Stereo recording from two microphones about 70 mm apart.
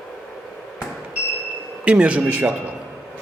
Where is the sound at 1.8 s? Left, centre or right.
Centre.